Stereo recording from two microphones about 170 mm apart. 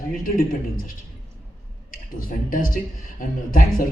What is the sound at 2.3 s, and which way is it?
A man's voice, 55° left (ahead or behind).